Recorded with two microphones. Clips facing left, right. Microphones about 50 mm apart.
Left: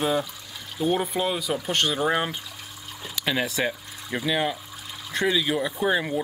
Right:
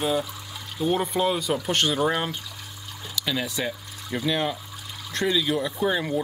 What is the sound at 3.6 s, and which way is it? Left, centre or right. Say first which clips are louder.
Speech: left 3 dB; left.